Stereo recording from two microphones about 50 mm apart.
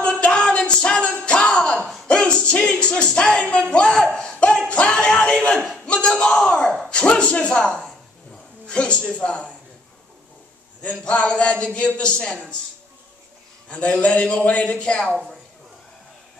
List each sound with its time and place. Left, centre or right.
0.2 s music: left
1.2 s a sound: centre
2.0 s music: left
3.7 s a sound: centre
5.9 s crowd: left
6.3 s a sound: centre
6.9 s a man's voice: left
10.8 s a man's voice: left
13.7 s a man's voice: left